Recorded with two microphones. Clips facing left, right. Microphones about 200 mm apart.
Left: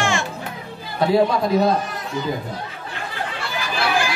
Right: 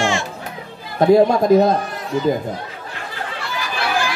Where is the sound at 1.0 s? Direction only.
45° right (ahead or behind).